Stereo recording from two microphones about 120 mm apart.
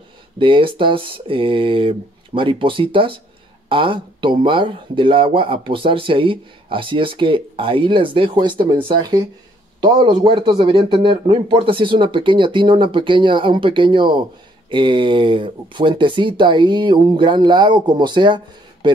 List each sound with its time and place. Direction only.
0.4 s speech: 45° right (ahead or behind)